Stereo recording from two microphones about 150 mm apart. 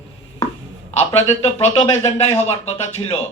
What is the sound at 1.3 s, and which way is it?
Speech, 45° left (ahead or behind).